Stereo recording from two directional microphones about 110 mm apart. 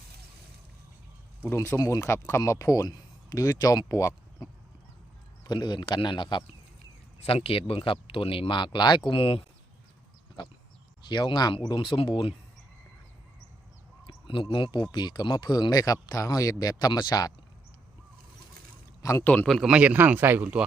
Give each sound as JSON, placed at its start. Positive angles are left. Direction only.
{"t": 1.5, "sound": "speech", "side_deg": 25}
{"t": 7.3, "sound": "speech", "side_deg": 60}
{"t": 9.0, "sound": "speech", "side_deg": 55}
{"t": 11.1, "sound": "speech", "side_deg": 45}
{"t": 14.5, "sound": "speech", "side_deg": 45}
{"t": 19.2, "sound": "a man's voice", "side_deg": 15}
{"t": 19.5, "sound": "speech", "side_deg": 0}
{"t": 19.7, "sound": "speech", "side_deg": -15}